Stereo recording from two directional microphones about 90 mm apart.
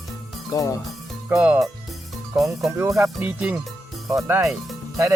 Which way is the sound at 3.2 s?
15° right (ahead or behind).